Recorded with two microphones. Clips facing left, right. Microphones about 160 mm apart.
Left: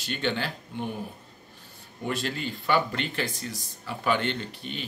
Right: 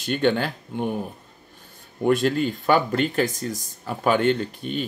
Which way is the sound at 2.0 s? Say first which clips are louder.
Right 11 dB; 50° right (ahead or behind).